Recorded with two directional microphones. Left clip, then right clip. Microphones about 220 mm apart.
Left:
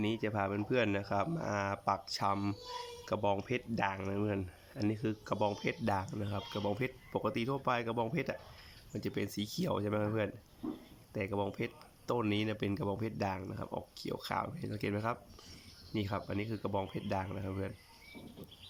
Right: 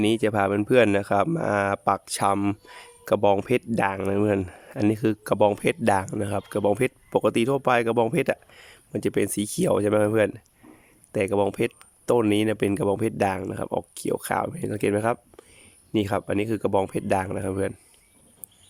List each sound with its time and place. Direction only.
0.0 s speech: 50° right (ahead or behind)